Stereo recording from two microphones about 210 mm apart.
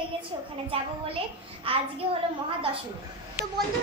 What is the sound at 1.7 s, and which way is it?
Speech, 25° right (ahead or behind).